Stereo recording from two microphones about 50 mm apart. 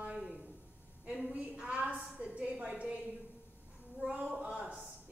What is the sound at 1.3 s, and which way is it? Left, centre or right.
A woman's voice, right.